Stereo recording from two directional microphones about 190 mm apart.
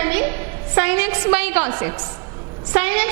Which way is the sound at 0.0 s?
10° right (ahead or behind).